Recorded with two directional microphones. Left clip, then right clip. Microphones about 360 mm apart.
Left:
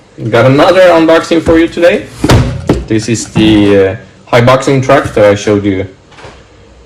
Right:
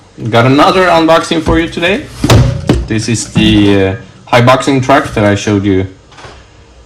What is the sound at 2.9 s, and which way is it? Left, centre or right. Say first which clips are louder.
Speech: left 3 dB; right.